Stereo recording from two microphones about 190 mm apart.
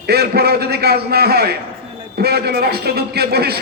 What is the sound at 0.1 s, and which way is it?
A man's voice, 55° right (ahead or behind).